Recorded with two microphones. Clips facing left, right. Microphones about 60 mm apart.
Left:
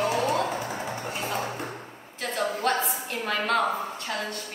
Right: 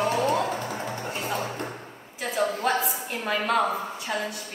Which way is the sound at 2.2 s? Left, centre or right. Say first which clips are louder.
Right 2 dB; centre.